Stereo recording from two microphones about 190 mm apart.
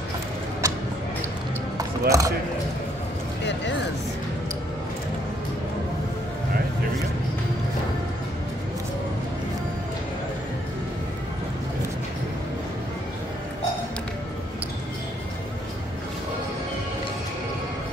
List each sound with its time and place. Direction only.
2.0 s speech: 15° right (ahead or behind)